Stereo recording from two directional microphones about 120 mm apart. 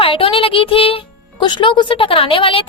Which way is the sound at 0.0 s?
50° left (ahead or behind).